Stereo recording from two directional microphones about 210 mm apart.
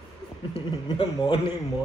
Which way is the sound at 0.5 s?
20° left (ahead or behind).